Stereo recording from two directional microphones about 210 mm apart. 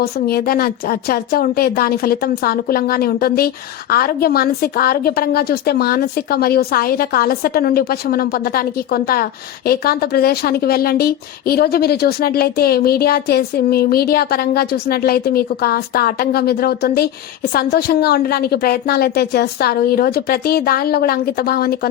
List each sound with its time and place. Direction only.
0.0 s a woman's voice: 45° left (ahead or behind)